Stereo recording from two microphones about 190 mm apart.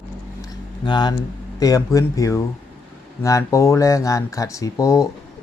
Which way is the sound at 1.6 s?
20° left (ahead or behind).